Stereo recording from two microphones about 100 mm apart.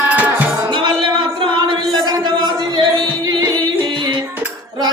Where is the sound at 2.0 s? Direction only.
45° right (ahead or behind).